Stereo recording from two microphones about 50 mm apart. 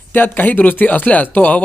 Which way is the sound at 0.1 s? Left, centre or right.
Left.